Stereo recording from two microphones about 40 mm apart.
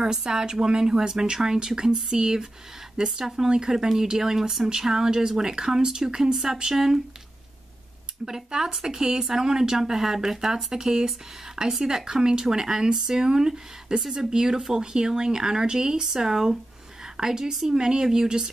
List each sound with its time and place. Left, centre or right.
0.0 s speech: centre
8.3 s a woman's voice: centre